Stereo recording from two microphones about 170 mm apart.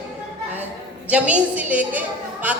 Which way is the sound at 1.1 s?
5° right (ahead or behind).